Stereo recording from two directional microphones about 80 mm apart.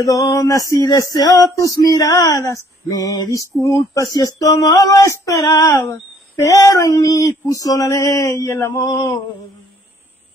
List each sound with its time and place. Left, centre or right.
0.0 s speech: left
2.9 s speech: left
8.7 s male singing: left